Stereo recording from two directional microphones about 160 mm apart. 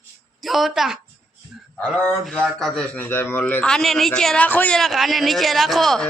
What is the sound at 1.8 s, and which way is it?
A man's voice, 10° left (ahead or behind).